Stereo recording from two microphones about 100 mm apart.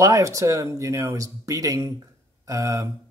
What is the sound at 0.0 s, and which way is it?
Speech, 30° right (ahead or behind).